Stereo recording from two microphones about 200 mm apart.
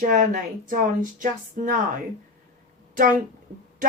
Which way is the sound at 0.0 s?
45° right (ahead or behind).